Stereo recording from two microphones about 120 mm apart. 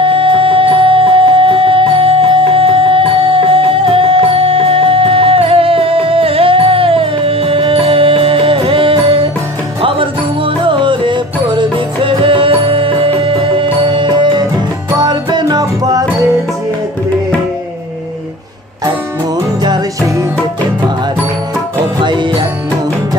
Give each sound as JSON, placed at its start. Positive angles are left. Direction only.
{"t": 0.0, "sound": "music", "side_deg": -45}
{"t": 19.6, "sound": "music", "side_deg": -35}
{"t": 22.0, "sound": "music", "side_deg": -40}